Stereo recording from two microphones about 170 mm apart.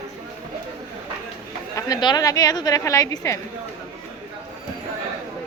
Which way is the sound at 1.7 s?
25° left (ahead or behind).